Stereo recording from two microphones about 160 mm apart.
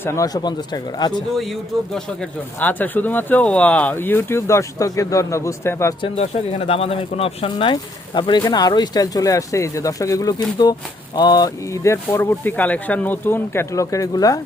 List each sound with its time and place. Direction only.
0.0 s speech: 20° left (ahead or behind)
1.4 s speech: centre (ahead or behind); by 5.9 s 20° left (ahead or behind)
6.0 s speech: 40° left (ahead or behind); by 14.4 s 20° left (ahead or behind)